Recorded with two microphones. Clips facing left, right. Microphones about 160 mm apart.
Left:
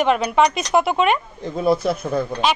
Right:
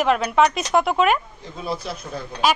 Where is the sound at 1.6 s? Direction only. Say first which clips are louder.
Left 10 dB; 55° left (ahead or behind).